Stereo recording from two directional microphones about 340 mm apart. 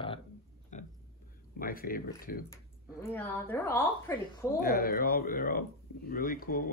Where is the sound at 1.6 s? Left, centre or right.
Left.